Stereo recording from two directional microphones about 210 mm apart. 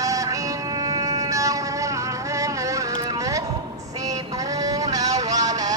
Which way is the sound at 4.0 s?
15° right (ahead or behind).